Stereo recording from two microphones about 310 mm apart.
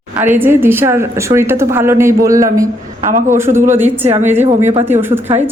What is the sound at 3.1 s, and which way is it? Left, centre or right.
Speech, right.